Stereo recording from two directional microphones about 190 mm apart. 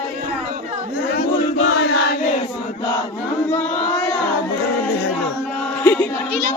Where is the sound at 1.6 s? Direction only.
85° left.